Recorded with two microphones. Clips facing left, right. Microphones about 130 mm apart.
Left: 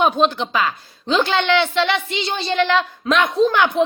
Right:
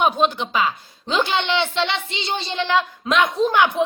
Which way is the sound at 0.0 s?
Centre (ahead or behind).